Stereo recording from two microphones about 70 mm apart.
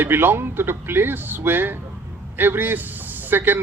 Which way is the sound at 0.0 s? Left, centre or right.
Right.